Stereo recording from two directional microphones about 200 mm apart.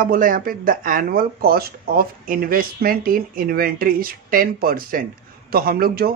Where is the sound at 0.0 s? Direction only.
45° right (ahead or behind).